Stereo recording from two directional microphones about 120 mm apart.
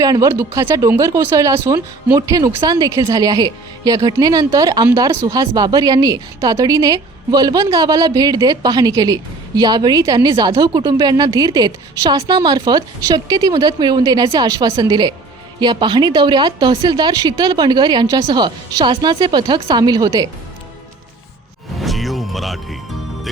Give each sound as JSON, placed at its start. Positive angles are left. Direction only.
{"t": 0.0, "sound": "a woman's voice", "side_deg": -30}
{"t": 21.8, "sound": "music", "side_deg": 0}